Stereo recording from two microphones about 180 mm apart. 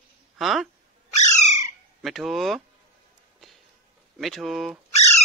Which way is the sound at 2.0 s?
Centre (ahead or behind).